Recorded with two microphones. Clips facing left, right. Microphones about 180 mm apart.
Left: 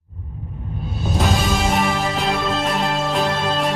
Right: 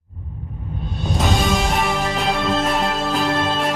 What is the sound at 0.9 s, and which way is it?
Music, centre (ahead or behind).